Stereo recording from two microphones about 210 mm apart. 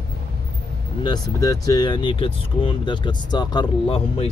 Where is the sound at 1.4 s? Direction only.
15° left (ahead or behind).